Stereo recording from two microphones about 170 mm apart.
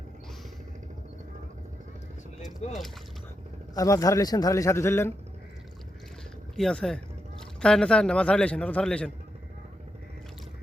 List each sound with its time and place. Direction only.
3.8 s a man's voice: 20° left (ahead or behind)
6.6 s a man's voice: 5° left (ahead or behind)